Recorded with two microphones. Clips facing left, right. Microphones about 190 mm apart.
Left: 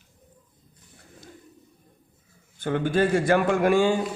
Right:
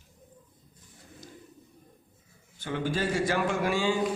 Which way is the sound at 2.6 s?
55° left (ahead or behind).